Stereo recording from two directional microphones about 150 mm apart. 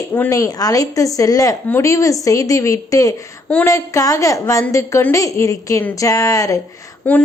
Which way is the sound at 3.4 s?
10° left (ahead or behind).